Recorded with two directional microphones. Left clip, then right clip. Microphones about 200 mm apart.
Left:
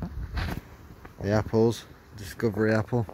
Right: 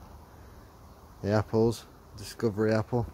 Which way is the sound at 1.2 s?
10° left (ahead or behind).